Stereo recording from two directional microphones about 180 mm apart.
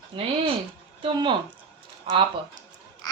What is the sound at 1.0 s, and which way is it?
Speech, 25° right (ahead or behind).